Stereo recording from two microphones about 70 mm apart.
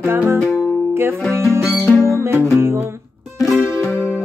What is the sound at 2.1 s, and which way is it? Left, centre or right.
Music, right.